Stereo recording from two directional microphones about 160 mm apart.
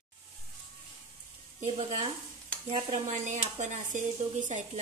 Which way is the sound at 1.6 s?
45° right (ahead or behind).